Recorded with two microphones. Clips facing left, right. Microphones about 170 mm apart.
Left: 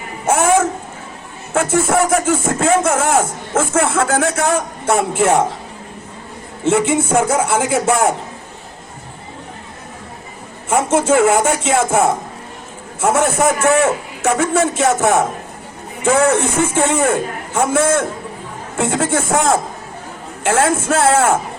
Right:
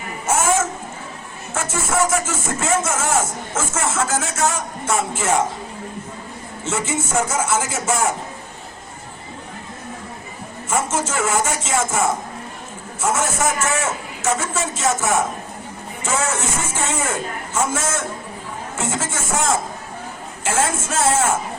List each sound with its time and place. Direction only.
0.3 s a sound: 60° left (ahead or behind)
1.5 s speech: 60° left (ahead or behind)
6.7 s speech: 60° left (ahead or behind)
10.7 s speech: 60° left (ahead or behind)